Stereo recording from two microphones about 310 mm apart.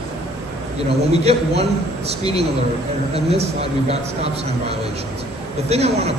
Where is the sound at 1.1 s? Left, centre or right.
Centre.